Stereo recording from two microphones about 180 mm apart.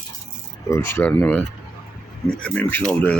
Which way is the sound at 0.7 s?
15° left (ahead or behind).